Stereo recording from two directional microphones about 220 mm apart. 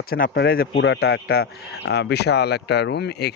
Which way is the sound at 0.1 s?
45° left (ahead or behind).